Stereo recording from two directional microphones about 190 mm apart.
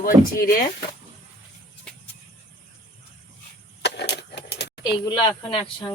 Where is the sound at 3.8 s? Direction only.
60° left (ahead or behind).